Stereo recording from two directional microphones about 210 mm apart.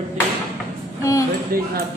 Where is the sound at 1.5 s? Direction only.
45° right (ahead or behind).